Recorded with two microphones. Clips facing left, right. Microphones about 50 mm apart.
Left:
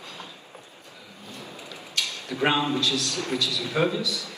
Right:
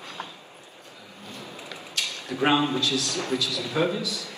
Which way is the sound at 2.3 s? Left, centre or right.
Right.